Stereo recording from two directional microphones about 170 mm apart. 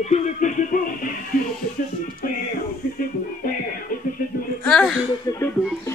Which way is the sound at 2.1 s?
55° left (ahead or behind).